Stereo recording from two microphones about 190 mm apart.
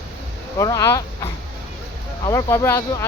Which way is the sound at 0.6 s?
20° left (ahead or behind).